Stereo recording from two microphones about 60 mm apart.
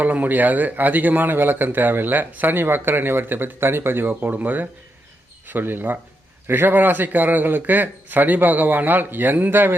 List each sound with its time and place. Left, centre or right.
0.0 s speech: right